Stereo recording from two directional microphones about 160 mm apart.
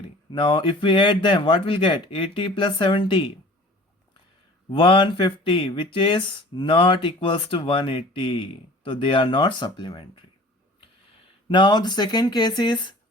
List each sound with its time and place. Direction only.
0.3 s speech: 35° left (ahead or behind)
4.7 s speech: 35° left (ahead or behind)
11.4 s speech: 30° left (ahead or behind)